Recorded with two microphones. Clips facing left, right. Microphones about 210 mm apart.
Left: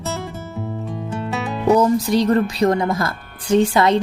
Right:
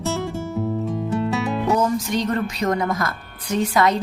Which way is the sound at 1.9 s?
35° left (ahead or behind).